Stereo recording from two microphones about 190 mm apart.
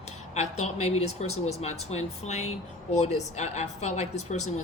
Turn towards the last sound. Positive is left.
turn(degrees=35)  # may be behind; listen again after turning